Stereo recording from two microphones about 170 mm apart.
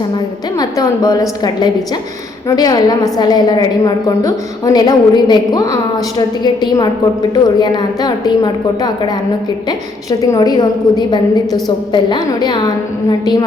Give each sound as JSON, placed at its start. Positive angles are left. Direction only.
{"t": 0.6, "sound": "a woman's voice", "side_deg": 20}
{"t": 2.6, "sound": "a woman's voice", "side_deg": 20}
{"t": 9.6, "sound": "a woman's voice", "side_deg": 20}